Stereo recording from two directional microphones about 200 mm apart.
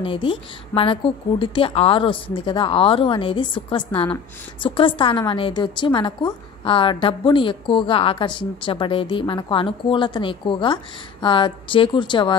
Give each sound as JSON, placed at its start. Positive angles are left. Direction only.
{"t": 0.0, "sound": "a woman's voice", "side_deg": 25}